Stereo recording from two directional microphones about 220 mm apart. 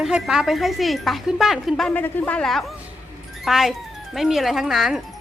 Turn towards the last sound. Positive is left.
turn(degrees=0)  # may be behind; listen again after turning